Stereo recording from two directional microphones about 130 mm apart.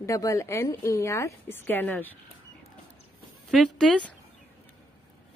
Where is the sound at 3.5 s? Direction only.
5° left (ahead or behind).